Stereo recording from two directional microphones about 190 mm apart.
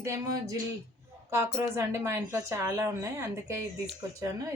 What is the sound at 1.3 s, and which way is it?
A woman's voice, 15° right (ahead or behind).